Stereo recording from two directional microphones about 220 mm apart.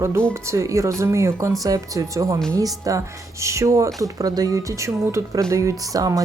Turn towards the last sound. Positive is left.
turn(degrees=-15)  # may be behind; listen again after turning